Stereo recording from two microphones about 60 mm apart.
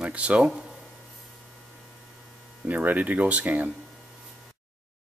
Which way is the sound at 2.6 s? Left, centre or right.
Right.